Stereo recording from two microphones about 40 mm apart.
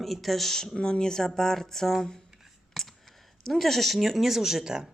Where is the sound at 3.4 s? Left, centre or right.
Centre.